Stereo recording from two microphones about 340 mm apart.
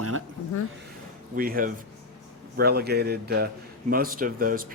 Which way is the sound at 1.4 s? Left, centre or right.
Right.